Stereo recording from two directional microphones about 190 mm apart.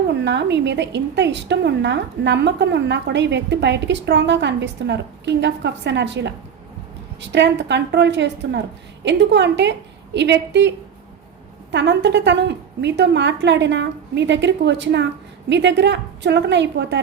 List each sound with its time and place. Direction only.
0.3 s a woman's voice: 65° right (ahead or behind)
11.7 s a woman's voice: 65° right (ahead or behind)